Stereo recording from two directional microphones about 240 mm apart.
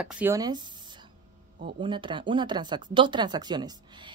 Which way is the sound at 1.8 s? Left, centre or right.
Centre.